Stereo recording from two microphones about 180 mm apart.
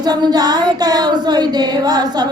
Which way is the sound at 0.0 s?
20° right (ahead or behind).